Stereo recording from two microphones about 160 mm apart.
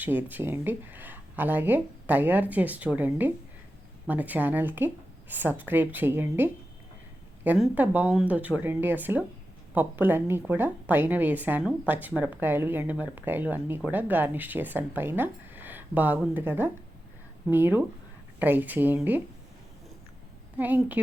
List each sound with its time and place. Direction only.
0.0 s a woman's voice: 10° right (ahead or behind)
20.6 s a woman's voice: 10° right (ahead or behind)